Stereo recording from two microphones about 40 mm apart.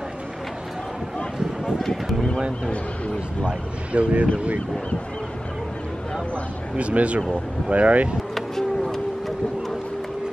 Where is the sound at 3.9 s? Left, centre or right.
Right.